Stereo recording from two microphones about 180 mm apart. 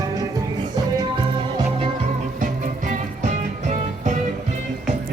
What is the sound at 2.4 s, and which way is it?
Music, 45° right (ahead or behind).